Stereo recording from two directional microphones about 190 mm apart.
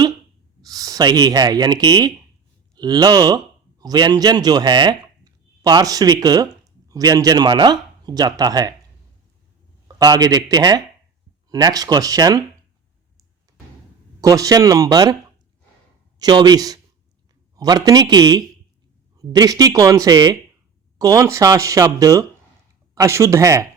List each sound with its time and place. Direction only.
0.6 s speech: 20° right (ahead or behind)
10.0 s speech: 20° right (ahead or behind)
14.2 s speech: 20° right (ahead or behind)
16.1 s a man's voice: 20° right (ahead or behind)